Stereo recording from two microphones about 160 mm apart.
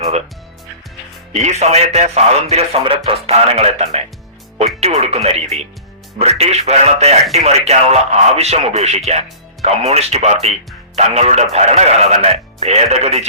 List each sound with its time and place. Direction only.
1.4 s speech: 45° right (ahead or behind)